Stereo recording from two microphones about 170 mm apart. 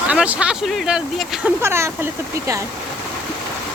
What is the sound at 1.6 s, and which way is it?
Speech, 15° right (ahead or behind).